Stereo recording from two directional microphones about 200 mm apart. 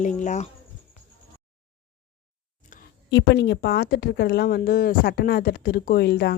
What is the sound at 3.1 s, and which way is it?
Speech, 60° left (ahead or behind).